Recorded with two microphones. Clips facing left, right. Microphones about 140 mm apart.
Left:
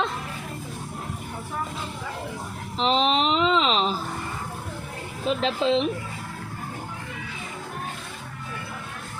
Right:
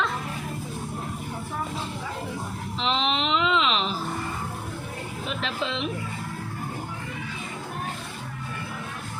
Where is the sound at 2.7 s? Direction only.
40° left (ahead or behind).